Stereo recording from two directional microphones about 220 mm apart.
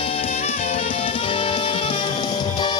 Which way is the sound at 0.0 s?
25° left (ahead or behind).